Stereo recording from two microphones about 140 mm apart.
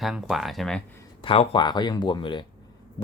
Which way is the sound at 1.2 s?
40° left (ahead or behind).